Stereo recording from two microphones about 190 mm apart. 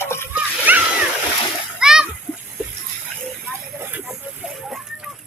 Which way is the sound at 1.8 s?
5° right (ahead or behind).